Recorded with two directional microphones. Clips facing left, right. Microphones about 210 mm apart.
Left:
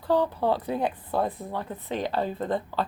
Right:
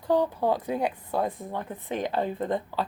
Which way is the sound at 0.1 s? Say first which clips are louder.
Even; 15° right (ahead or behind).